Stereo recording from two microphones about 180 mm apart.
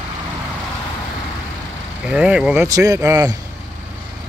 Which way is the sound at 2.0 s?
5° right (ahead or behind).